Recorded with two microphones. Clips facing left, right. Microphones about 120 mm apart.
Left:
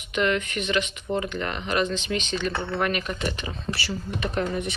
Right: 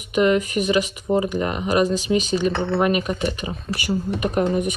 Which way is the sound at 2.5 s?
20° right (ahead or behind).